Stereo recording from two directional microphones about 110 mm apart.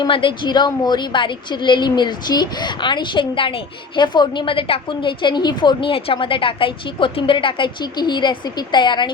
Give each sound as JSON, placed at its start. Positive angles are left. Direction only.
{"t": 0.0, "sound": "a woman's voice", "side_deg": 50}